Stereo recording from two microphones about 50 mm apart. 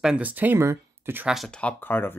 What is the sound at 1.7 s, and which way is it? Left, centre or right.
Speech, left.